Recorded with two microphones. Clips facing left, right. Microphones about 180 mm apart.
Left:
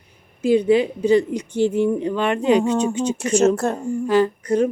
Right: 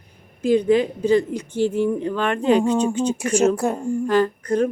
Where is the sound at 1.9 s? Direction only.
15° left (ahead or behind).